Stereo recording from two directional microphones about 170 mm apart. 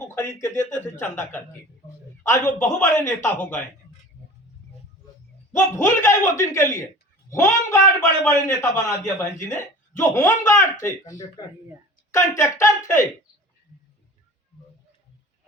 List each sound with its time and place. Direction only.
0.2 s a man's voice: 15° left (ahead or behind)
5.5 s a man's voice: 15° left (ahead or behind)